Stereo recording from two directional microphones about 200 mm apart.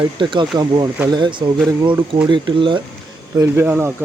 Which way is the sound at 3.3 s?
15° right (ahead or behind).